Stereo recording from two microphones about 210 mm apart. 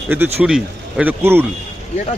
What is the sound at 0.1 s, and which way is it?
Speech, 5° right (ahead or behind).